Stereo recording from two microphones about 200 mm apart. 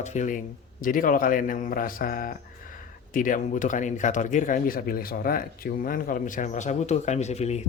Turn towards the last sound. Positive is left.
turn(degrees=35)  # may be behind; listen again after turning